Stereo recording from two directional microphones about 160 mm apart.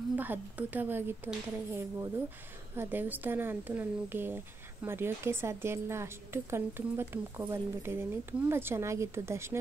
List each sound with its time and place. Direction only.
0.1 s a woman's voice: 10° right (ahead or behind)